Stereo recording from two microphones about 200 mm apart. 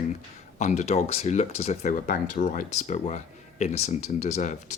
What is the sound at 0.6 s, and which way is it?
Speech, 35° left (ahead or behind).